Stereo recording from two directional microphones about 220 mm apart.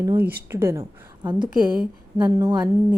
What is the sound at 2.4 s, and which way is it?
Speech, 15° right (ahead or behind).